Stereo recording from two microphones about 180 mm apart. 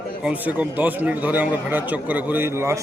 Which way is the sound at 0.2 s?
5° right (ahead or behind).